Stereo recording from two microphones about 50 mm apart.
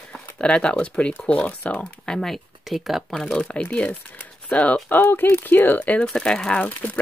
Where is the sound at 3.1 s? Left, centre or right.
Centre.